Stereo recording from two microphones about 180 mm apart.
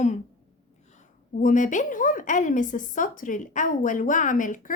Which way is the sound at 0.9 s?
45° left (ahead or behind).